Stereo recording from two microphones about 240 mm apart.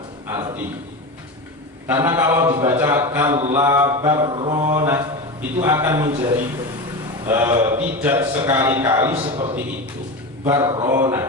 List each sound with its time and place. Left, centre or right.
0.3 s a man's voice: centre
1.9 s a man's voice: centre
9.2 s a man's voice: right
10.4 s a man's voice: centre